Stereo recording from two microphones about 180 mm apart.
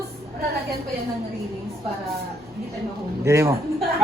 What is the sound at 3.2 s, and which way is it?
Speech, 15° right (ahead or behind).